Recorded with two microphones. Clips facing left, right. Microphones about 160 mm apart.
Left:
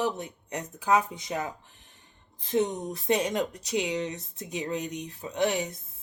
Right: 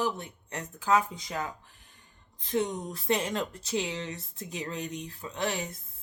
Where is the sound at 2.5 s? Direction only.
25° left (ahead or behind).